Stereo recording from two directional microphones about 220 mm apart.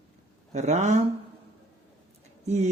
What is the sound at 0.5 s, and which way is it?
Speech, 30° right (ahead or behind).